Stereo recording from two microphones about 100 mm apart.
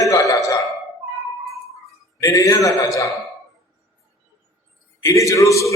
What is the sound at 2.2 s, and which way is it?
Speech, 35° left (ahead or behind).